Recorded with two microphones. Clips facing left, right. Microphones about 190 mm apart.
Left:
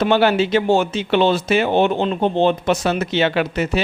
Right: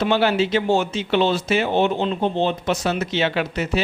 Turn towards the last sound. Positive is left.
turn(degrees=60)  # may be behind; listen again after turning